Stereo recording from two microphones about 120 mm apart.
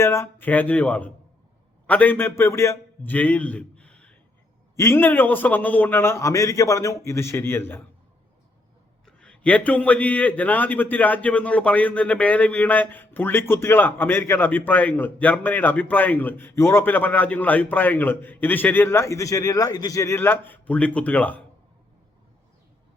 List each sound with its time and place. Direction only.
0.0 s a man's voice: 25° left (ahead or behind)
4.8 s a man's voice: 20° left (ahead or behind)
9.0 s a man's voice: 10° left (ahead or behind)